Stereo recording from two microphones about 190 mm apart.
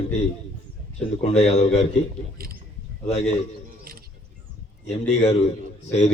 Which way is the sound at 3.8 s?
50° right (ahead or behind).